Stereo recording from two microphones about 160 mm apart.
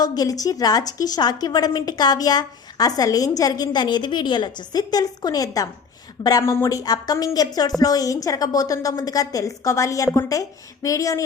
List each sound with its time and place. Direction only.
0.0 s a woman's voice: 25° left (ahead or behind)